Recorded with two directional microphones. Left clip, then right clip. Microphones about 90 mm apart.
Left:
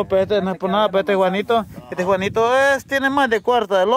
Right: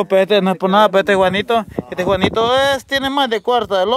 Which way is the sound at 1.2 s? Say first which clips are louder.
Right 3 dB; 30° right (ahead or behind).